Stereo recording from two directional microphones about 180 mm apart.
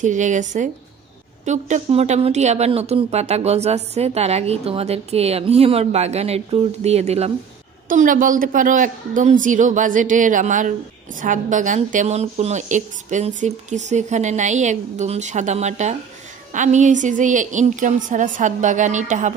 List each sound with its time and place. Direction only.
0.0 s a woman's voice: 45° right (ahead or behind)
7.9 s a woman's voice: 50° right (ahead or behind)